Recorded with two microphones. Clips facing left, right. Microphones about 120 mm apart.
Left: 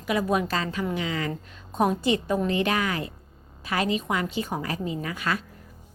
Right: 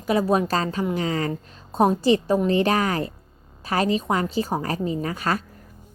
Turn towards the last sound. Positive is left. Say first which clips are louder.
# right 4 dB
turn(degrees=-40)  # may be behind; listen again after turning